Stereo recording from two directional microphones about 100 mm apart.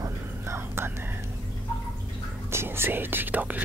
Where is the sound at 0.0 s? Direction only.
25° right (ahead or behind).